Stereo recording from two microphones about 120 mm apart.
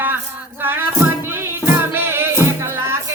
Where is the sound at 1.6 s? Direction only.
20° right (ahead or behind).